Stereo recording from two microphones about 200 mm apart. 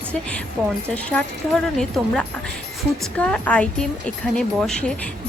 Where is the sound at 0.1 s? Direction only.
5° left (ahead or behind).